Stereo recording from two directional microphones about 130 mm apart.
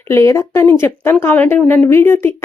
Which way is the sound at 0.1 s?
20° left (ahead or behind).